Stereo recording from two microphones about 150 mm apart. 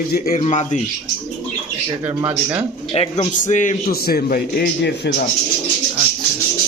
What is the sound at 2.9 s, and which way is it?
A man's voice, 45° left (ahead or behind).